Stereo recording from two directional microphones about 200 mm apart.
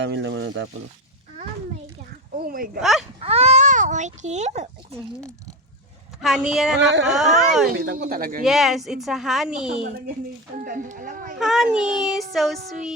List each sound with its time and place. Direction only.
0.0 s frying: 65° right (ahead or behind)
2.4 s speech: 45° right (ahead or behind)
3.2 s a child's voice: 30° right (ahead or behind)
6.2 s a woman's voice: centre (ahead or behind)
7.9 s speech: 45° right (ahead or behind)
8.4 s a woman's voice: centre (ahead or behind)
10.6 s speech: 45° right (ahead or behind)
11.3 s a woman's voice: centre (ahead or behind)